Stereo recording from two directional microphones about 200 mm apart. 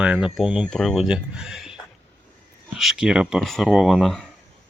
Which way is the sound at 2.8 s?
Centre (ahead or behind).